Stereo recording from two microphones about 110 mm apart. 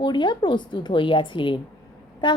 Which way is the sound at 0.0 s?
45° left (ahead or behind).